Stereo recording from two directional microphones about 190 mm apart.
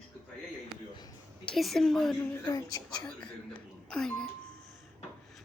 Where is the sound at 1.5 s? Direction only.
Centre (ahead or behind).